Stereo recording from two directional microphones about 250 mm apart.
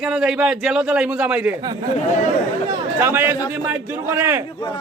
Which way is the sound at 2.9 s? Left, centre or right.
Centre.